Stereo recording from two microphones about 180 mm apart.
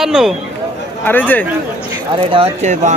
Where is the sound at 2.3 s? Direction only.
30° right (ahead or behind).